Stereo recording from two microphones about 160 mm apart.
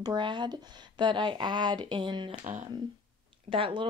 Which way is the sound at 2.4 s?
55° right (ahead or behind).